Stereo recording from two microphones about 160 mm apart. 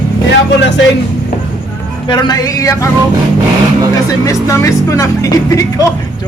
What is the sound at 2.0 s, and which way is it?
Speech, 25° left (ahead or behind).